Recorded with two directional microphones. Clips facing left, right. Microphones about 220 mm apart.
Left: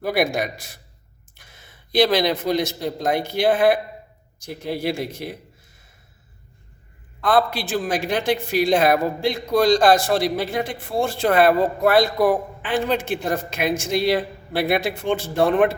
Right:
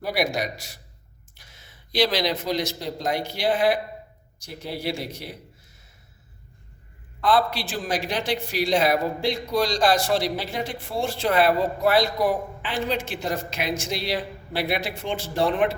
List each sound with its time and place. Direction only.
0.0 s a man's voice: 50° left (ahead or behind)
7.2 s a man's voice: 50° left (ahead or behind)